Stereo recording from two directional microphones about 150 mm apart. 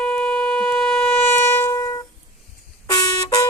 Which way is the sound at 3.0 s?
25° left (ahead or behind).